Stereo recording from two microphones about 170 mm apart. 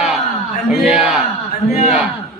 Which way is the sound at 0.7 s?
5° right (ahead or behind).